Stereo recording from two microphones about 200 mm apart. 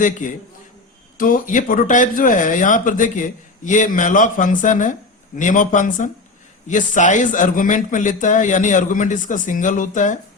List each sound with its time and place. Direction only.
0.0 s speech: 40° left (ahead or behind)